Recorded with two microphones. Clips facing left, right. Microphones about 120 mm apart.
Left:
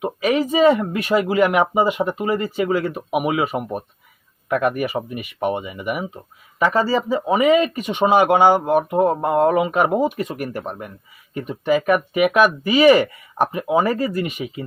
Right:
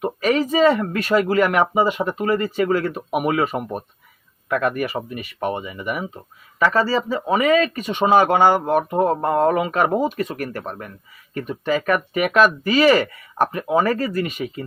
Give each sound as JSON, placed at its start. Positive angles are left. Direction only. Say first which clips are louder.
{"t": 0.0, "sound": "speech", "louder": "even", "side_deg": 10}
{"t": 4.4, "sound": "speech", "louder": "left 2 dB", "side_deg": 20}
{"t": 4.7, "sound": "speech", "louder": "left 1 dB", "side_deg": 10}